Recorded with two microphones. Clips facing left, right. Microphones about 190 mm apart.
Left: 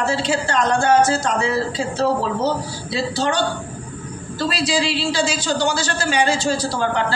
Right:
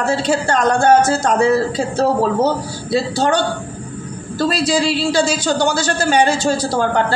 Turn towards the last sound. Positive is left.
turn(degrees=-50)  # may be behind; listen again after turning